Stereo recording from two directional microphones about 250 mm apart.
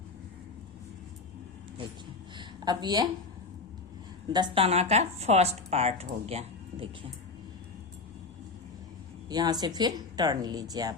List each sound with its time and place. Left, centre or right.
2.4 s a woman's voice: centre
4.3 s speech: centre
9.3 s speech: centre